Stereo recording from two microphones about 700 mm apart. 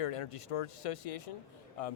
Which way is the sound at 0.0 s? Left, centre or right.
Left.